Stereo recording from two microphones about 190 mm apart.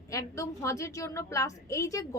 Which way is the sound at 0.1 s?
15° left (ahead or behind).